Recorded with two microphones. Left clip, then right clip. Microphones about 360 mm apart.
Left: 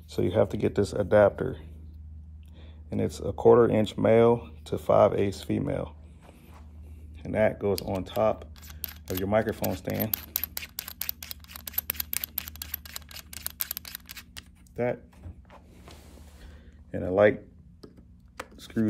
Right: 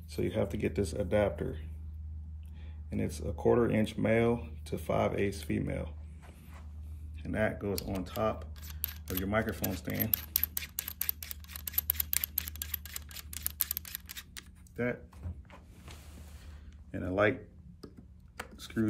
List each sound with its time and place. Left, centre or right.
0.1 s speech: centre
2.9 s speech: centre
7.2 s camera: centre
16.9 s speech: left
18.6 s chopping: left